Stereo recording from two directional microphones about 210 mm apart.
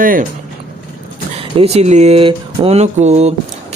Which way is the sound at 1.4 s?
30° right (ahead or behind).